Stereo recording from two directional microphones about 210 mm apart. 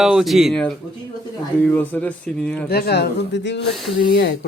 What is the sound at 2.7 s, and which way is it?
Speech, 50° left (ahead or behind).